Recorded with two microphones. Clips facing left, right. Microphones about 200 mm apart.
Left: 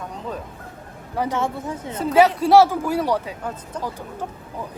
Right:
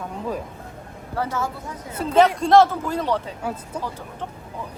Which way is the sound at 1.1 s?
15° left (ahead or behind).